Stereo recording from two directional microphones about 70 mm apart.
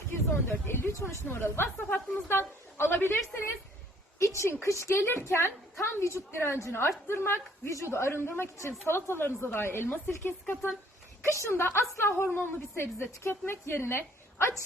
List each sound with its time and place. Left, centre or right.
0.1 s speech: left
4.2 s speech: left
11.3 s speech: left